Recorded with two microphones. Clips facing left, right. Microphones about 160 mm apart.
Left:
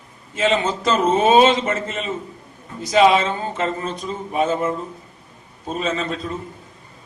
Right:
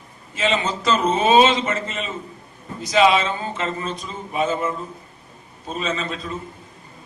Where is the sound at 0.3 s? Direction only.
50° left (ahead or behind).